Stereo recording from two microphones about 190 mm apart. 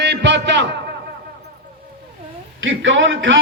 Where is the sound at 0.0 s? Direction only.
65° right (ahead or behind).